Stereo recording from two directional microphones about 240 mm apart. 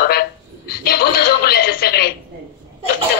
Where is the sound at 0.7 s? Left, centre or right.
Left.